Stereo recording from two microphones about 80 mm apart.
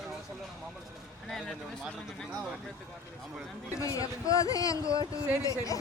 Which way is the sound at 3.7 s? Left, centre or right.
Left.